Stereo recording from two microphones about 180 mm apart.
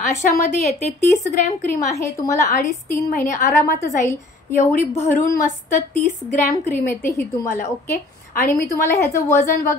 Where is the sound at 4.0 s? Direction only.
15° left (ahead or behind).